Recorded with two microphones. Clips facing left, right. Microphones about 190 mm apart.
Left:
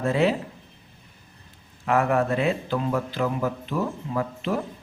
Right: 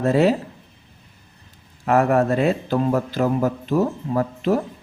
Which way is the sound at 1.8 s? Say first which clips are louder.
Right 4 dB; 40° right (ahead or behind).